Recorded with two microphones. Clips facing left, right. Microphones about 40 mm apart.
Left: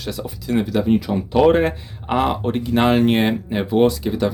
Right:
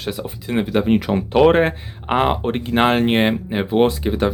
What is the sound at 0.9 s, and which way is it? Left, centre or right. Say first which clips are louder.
Speech: right 2 dB; right.